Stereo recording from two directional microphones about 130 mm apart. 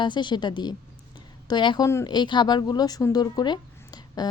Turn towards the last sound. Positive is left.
turn(degrees=35)  # may be behind; listen again after turning